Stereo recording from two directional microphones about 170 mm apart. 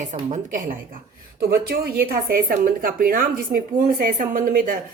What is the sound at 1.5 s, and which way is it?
Speech, 65° right (ahead or behind).